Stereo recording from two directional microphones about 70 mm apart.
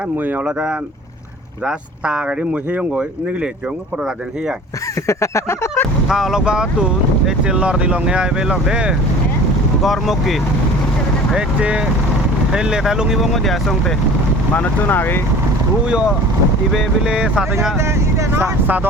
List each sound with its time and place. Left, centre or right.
1.6 s speech: centre
5.0 s a sound: left
6.1 s speech: centre
9.8 s speech: centre
11.3 s speech: centre
14.5 s speech: left
15.9 s speech: centre